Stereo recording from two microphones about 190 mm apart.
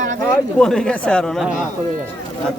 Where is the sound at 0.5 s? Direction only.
5° left (ahead or behind).